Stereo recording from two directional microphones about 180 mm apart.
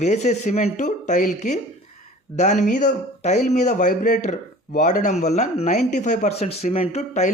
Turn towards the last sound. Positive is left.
turn(degrees=40)  # may be behind; listen again after turning